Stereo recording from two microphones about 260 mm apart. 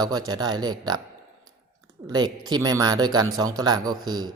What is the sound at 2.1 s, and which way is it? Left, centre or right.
Speech, centre.